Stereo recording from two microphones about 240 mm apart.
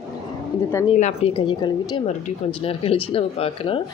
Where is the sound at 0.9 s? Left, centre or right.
Left.